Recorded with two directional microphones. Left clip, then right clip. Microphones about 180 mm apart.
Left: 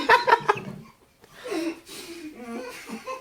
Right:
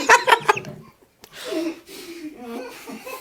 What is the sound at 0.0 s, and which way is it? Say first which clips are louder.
Chicken: right 4 dB; 15° right (ahead or behind).